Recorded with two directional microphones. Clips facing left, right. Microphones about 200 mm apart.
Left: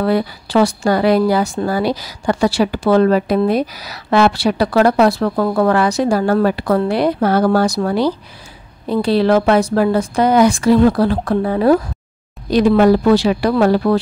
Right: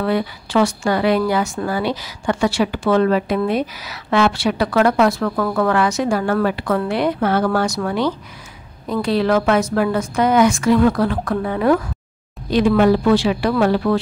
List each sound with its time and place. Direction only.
0.0 s a woman's voice: 35° left (ahead or behind)